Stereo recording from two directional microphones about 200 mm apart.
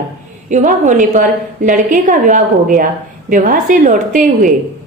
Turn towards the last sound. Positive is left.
turn(degrees=-40)  # may be behind; listen again after turning